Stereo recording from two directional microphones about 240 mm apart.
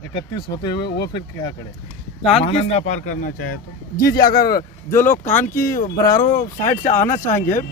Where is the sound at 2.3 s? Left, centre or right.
Left.